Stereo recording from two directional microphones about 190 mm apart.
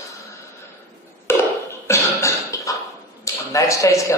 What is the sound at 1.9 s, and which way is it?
Cough, 15° left (ahead or behind).